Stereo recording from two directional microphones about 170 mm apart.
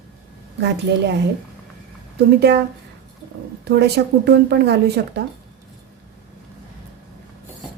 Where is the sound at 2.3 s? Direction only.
75° right (ahead or behind).